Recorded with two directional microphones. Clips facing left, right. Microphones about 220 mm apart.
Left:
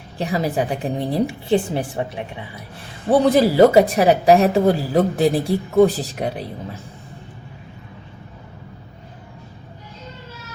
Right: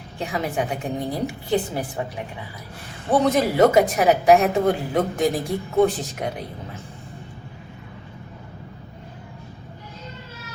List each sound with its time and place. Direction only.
0.2 s a woman's voice: 35° left (ahead or behind)